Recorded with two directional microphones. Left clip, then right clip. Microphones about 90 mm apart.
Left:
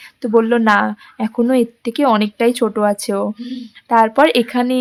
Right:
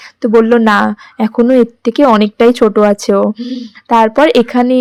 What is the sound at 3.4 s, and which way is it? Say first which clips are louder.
Speech: right 7 dB; 10° right (ahead or behind).